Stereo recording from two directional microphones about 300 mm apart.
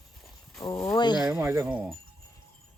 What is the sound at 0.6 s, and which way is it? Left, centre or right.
Speech, centre.